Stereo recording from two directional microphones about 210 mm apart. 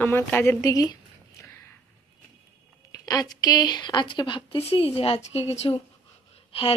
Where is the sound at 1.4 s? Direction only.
10° left (ahead or behind).